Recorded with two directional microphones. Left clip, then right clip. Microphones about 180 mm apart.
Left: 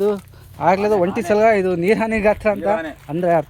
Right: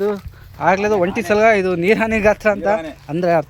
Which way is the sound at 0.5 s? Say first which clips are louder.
Even; 10° left (ahead or behind).